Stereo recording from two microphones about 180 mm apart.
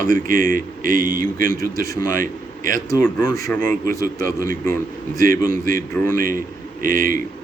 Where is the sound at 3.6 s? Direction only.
50° right (ahead or behind).